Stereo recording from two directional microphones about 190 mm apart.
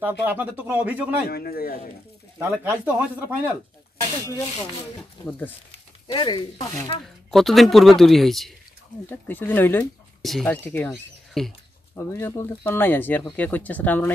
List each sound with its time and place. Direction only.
0.0 s speech: 10° right (ahead or behind)
1.3 s a man's voice: 50° left (ahead or behind)
2.3 s speech: 10° right (ahead or behind)
6.1 s speech: 25° left (ahead or behind)
7.2 s speech: centre (ahead or behind)
11.9 s speech: 10° left (ahead or behind)